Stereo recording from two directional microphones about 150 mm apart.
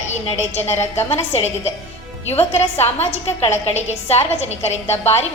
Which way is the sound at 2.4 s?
45° left (ahead or behind).